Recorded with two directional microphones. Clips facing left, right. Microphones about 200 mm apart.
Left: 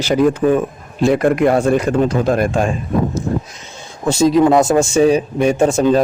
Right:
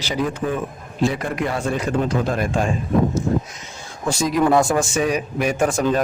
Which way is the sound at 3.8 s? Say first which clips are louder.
Left 8 dB; 25° left (ahead or behind).